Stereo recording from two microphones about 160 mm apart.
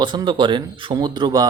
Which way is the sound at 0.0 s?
30° right (ahead or behind).